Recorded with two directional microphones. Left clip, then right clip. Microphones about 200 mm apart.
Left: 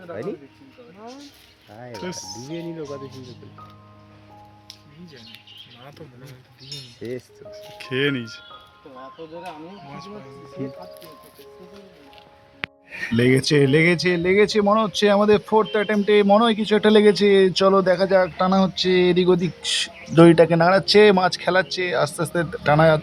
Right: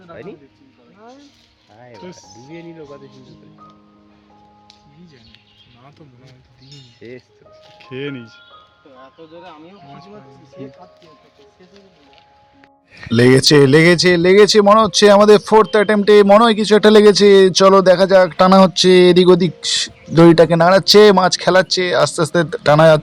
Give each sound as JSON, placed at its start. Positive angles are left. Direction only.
{"t": 1.9, "sound": "speech", "side_deg": 5}
{"t": 2.5, "sound": "speech", "side_deg": 40}
{"t": 7.0, "sound": "speech", "side_deg": 45}
{"t": 7.8, "sound": "speech", "side_deg": 0}
{"t": 12.9, "sound": "speech", "side_deg": 5}
{"t": 13.1, "sound": "speech", "side_deg": -25}
{"t": 19.6, "sound": "speech", "side_deg": -10}